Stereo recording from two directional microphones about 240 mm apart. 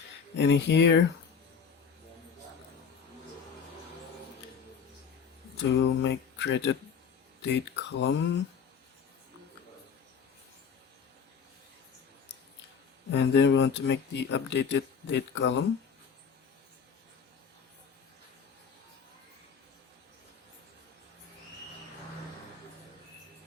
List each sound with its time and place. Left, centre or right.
0.3 s speech: left
5.7 s speech: left
13.1 s speech: left